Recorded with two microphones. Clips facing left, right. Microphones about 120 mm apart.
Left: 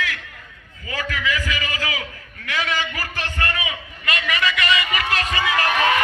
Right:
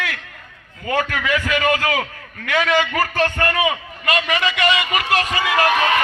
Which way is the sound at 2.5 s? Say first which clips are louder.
Right 7 dB; 50° right (ahead or behind).